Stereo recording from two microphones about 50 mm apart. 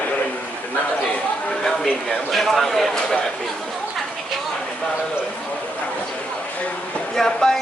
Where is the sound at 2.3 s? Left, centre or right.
Centre.